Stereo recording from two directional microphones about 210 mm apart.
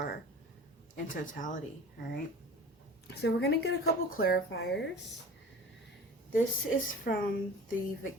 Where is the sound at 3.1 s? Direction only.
50° left (ahead or behind).